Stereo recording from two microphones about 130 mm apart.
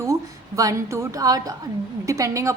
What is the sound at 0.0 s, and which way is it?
A woman's voice, 25° right (ahead or behind).